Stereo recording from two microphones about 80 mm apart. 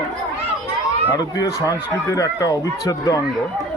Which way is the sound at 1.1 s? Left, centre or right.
Left.